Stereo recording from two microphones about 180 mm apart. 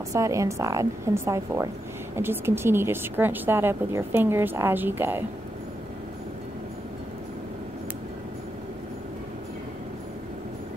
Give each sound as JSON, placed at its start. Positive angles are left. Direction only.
{"t": 0.1, "sound": "speech", "side_deg": -15}